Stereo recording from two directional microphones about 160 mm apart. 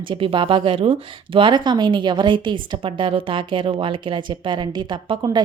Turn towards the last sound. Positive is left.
turn(degrees=-30)  # may be behind; listen again after turning